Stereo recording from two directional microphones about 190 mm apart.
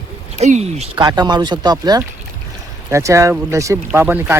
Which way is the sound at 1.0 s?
20° right (ahead or behind).